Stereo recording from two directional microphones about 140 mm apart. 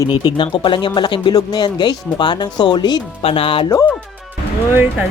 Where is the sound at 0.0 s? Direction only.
30° left (ahead or behind).